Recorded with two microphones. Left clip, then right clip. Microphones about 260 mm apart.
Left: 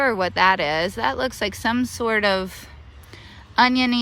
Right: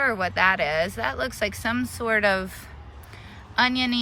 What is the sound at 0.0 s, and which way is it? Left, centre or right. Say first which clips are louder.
Speech: left 3 dB; centre.